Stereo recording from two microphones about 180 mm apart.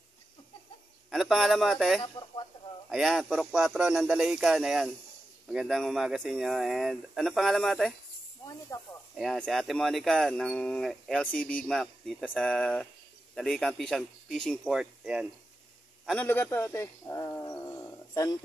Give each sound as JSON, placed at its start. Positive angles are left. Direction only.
{"t": 1.1, "sound": "speech", "side_deg": 0}
{"t": 2.0, "sound": "speech", "side_deg": 25}
{"t": 2.9, "sound": "speech", "side_deg": 0}
{"t": 8.7, "sound": "speech", "side_deg": 15}
{"t": 9.1, "sound": "speech", "side_deg": 0}
{"t": 16.1, "sound": "speech", "side_deg": 10}